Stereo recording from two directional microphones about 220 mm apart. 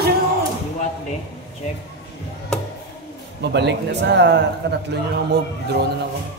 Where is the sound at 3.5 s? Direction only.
50° right (ahead or behind).